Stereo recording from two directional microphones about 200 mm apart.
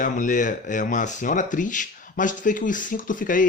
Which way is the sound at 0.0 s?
40° left (ahead or behind).